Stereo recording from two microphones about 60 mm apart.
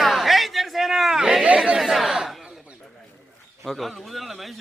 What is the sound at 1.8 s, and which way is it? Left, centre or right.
Chatter, centre.